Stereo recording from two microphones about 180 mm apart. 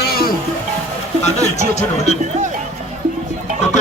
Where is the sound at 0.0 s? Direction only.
55° left (ahead or behind).